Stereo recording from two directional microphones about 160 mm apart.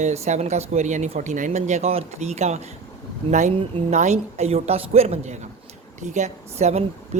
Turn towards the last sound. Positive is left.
turn(degrees=-45)  # may be behind; listen again after turning